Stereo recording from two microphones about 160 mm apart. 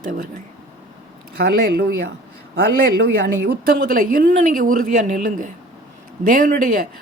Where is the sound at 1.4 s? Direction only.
75° right (ahead or behind).